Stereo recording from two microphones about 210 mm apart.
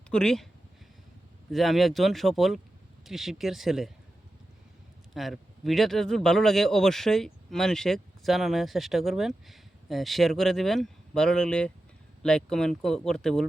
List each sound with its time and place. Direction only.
0.1 s speech: 5° left (ahead or behind)
1.5 s speech: centre (ahead or behind)
5.1 s speech: centre (ahead or behind)